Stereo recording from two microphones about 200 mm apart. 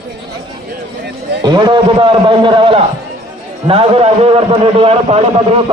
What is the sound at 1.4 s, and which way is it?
A man's voice, 20° right (ahead or behind).